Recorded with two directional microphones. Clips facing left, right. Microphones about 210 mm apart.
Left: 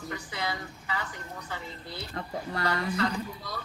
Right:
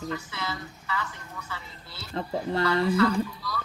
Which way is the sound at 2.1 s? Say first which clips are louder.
Right 8 dB; 25° right (ahead or behind).